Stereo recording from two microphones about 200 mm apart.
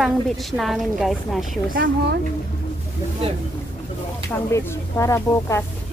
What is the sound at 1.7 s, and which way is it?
Speech, 45° right (ahead or behind).